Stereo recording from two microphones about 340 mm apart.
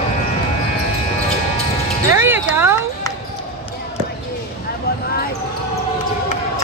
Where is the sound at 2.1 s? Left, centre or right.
Centre.